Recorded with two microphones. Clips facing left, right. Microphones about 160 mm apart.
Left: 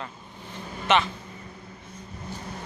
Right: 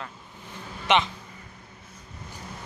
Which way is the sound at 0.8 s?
15° right (ahead or behind).